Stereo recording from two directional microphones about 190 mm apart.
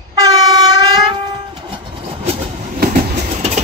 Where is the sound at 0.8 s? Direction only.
20° right (ahead or behind).